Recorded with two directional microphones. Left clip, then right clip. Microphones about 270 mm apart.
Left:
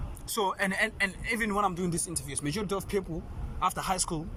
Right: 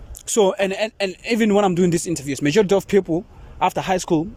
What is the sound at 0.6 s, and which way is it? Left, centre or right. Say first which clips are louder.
A man's voice: right 7 dB; right.